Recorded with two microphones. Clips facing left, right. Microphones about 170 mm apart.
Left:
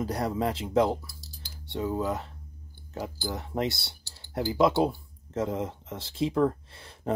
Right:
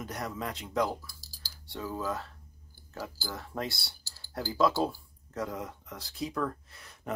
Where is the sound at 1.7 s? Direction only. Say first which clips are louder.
Left 6 dB; 20° left (ahead or behind).